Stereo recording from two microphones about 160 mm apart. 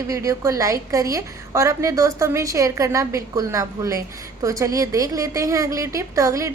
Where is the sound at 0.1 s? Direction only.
20° right (ahead or behind).